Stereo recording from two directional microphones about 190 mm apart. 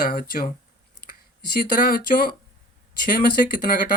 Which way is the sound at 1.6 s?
50° left (ahead or behind).